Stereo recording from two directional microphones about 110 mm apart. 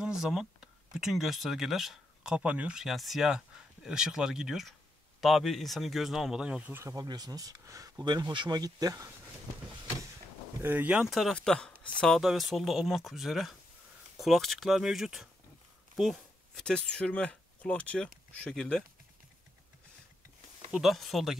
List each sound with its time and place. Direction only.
0.0 s speech: 5° right (ahead or behind)
6.7 s speech: 30° right (ahead or behind)
8.0 s speech: 40° right (ahead or behind)
10.6 s speech: 15° right (ahead or behind)
11.1 s speech: 5° left (ahead or behind)
20.7 s speech: centre (ahead or behind)